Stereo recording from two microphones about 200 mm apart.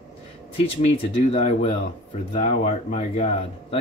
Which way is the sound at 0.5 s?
30° left (ahead or behind).